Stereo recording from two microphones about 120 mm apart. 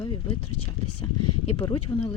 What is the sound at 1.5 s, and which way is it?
Speech, 35° left (ahead or behind).